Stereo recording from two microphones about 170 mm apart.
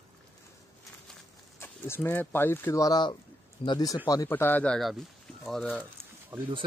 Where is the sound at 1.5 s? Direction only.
15° left (ahead or behind).